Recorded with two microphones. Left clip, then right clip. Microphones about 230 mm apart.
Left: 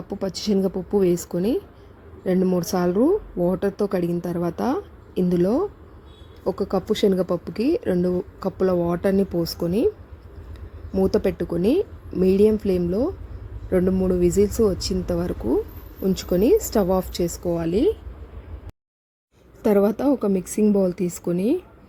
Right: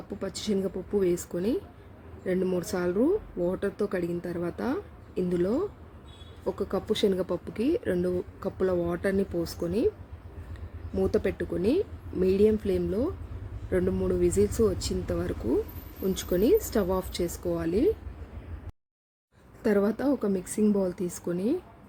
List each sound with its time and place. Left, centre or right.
0.2 s speech: left
10.9 s speech: left
19.6 s a woman's voice: centre